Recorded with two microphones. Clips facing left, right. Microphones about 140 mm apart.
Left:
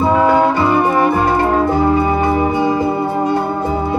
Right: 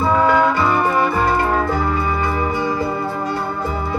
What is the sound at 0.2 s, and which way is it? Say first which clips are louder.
Music: left 1 dB; 35° left (ahead or behind).